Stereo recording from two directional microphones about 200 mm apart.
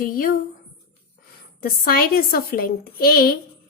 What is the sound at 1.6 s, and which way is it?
A woman's voice, 45° left (ahead or behind).